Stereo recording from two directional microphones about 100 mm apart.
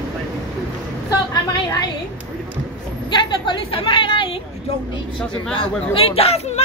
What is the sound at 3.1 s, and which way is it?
A woman's voice, 50° left (ahead or behind).